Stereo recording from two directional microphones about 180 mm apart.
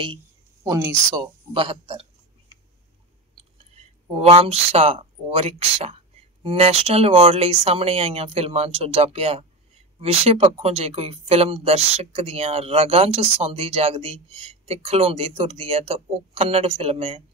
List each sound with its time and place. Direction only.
0.7 s speech: 15° right (ahead or behind)
3.3 s speech: 35° right (ahead or behind)